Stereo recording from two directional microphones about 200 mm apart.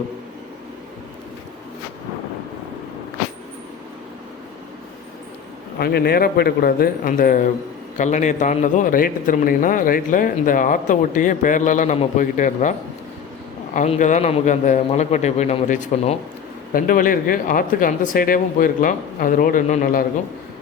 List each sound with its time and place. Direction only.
5.8 s a man's voice: 50° left (ahead or behind)
13.7 s a man's voice: 40° left (ahead or behind)